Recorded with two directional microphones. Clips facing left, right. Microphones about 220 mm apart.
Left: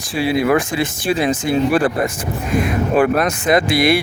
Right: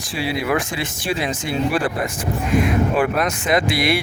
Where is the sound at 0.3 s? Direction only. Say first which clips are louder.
Left 6 dB; 45° left (ahead or behind).